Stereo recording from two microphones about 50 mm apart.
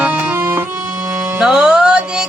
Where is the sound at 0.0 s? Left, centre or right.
Right.